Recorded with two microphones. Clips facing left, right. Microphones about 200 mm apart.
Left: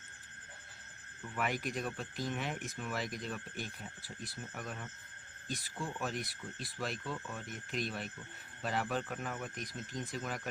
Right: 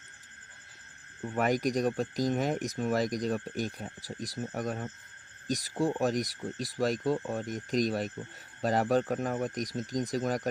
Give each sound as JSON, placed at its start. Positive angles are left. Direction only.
{"t": 1.2, "sound": "speech", "side_deg": -40}